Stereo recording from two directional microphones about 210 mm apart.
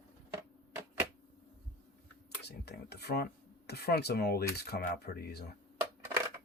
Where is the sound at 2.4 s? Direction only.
50° left (ahead or behind).